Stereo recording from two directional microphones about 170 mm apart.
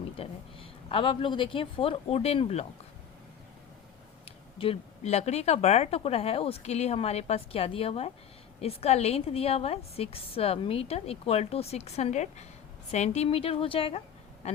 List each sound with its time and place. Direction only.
0.2 s speech: 35° left (ahead or behind)
4.3 s a woman's voice: 35° left (ahead or behind)